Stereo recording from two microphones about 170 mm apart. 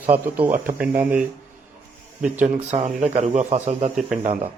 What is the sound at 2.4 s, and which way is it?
Speech, 40° right (ahead or behind).